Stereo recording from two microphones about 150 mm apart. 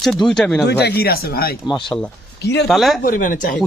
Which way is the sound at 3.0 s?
65° left (ahead or behind).